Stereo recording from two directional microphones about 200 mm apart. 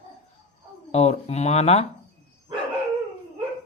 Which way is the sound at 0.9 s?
35° left (ahead or behind).